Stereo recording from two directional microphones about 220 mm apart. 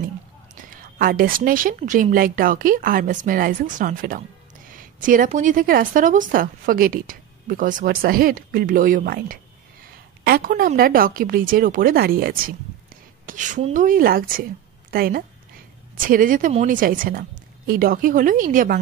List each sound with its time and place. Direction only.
0.7 s a woman's voice: 40° right (ahead or behind)